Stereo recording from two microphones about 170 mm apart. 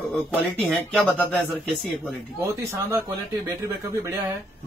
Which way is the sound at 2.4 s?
15° right (ahead or behind).